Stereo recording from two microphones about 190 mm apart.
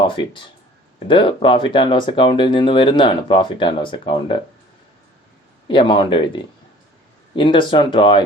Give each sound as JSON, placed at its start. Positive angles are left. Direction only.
{"t": 0.9, "sound": "speech", "side_deg": 25}
{"t": 5.6, "sound": "speech", "side_deg": 25}